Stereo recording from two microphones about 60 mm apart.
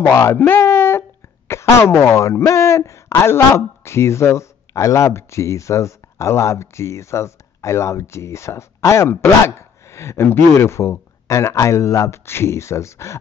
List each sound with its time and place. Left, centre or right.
0.1 s speech: left
0.4 s speech: left
0.7 s a sound: left
1.5 s speech: left